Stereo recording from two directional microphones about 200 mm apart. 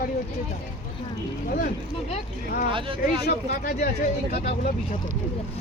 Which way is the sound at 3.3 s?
45° left (ahead or behind).